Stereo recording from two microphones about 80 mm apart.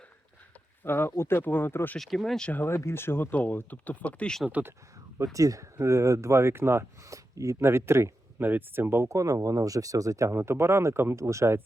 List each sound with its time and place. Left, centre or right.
0.9 s speech: left
2.0 s speech: centre
2.5 s speech: left
5.2 s speech: right